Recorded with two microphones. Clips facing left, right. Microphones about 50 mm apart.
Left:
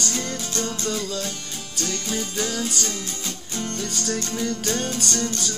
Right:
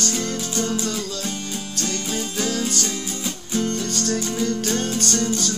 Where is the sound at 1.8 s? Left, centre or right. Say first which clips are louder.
Even; centre.